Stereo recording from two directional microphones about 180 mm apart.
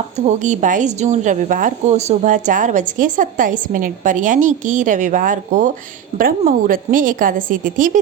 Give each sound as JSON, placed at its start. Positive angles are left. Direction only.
{"t": 0.3, "sound": "a woman's voice", "side_deg": -40}